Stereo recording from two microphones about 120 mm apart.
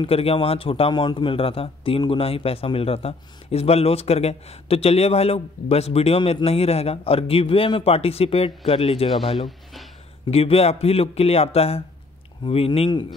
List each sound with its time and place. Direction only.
0.0 s a man's voice: 55° left (ahead or behind)